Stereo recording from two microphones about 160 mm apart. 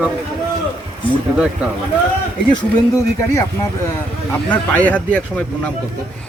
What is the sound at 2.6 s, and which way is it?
Speech, 20° left (ahead or behind).